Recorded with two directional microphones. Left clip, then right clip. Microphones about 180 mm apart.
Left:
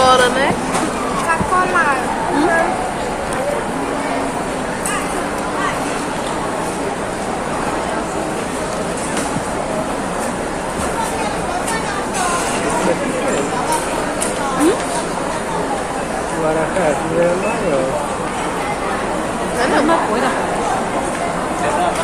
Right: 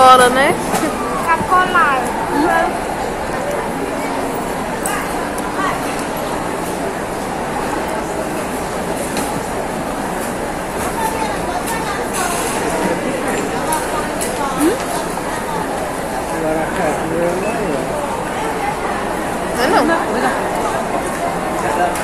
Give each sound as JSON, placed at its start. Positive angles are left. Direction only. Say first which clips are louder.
{"t": 0.0, "sound": "train", "louder": "right 4 dB", "side_deg": -50}